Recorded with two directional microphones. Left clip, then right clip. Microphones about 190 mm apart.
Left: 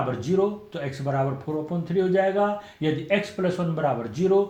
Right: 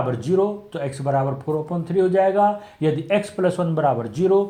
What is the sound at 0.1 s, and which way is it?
A man's voice, 40° right (ahead or behind).